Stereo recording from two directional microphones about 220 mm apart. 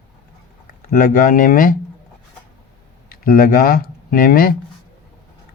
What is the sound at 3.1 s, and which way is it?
Speech, 40° left (ahead or behind).